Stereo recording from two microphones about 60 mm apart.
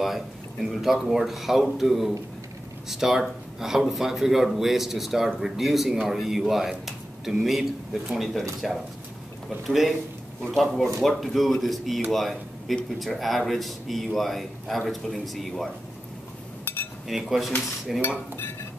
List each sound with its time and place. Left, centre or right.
0.0 s speech: centre
9.7 s speech: centre
16.7 s cutlery: left
17.1 s speech: centre